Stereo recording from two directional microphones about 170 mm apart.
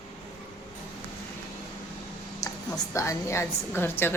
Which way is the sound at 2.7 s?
20° left (ahead or behind).